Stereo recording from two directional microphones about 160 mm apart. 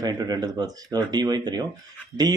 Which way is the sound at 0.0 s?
25° right (ahead or behind).